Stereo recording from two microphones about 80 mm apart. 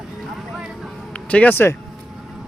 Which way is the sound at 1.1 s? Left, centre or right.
Centre.